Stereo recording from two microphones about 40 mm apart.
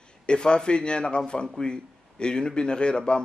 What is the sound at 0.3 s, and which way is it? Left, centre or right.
A man's voice, left.